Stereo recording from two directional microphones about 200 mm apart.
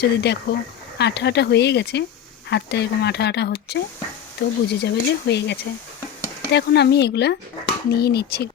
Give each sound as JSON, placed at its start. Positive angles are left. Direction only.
{"t": 0.0, "sound": "speech", "side_deg": 55}